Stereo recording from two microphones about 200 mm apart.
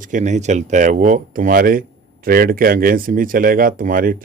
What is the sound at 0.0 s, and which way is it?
Speech, 40° right (ahead or behind).